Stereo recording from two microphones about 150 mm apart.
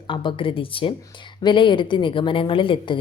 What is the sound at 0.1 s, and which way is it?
Speech, 35° left (ahead or behind).